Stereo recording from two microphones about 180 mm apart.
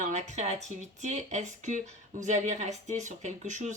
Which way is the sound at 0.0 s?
40° right (ahead or behind).